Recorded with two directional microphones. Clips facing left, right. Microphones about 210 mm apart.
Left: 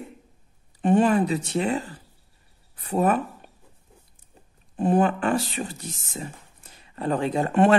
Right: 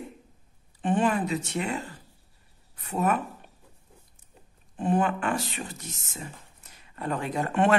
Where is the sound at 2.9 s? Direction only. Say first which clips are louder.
Left 4 dB; 30° left (ahead or behind).